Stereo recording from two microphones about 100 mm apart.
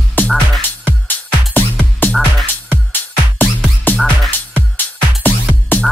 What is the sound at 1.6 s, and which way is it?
Music, 15° left (ahead or behind).